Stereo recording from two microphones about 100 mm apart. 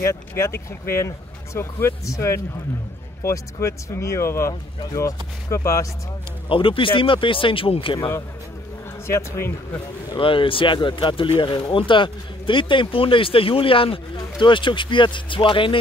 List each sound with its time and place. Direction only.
0.0 s speech: 25° left (ahead or behind)
6.5 s speech: 60° left (ahead or behind)
9.0 s speech: 25° left (ahead or behind)
10.1 s speech: 60° left (ahead or behind)